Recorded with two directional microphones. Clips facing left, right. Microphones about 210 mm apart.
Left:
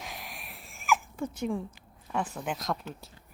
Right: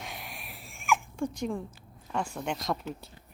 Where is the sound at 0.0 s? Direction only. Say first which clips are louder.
Even; centre (ahead or behind).